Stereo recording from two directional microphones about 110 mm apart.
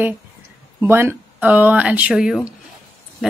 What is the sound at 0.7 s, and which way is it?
Speech, 20° right (ahead or behind).